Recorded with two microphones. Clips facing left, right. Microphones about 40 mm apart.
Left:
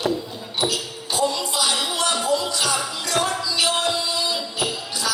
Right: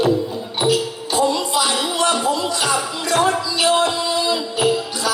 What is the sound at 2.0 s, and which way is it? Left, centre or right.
Music, right.